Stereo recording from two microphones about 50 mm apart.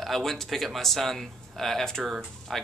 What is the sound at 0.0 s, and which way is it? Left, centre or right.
Speech, centre.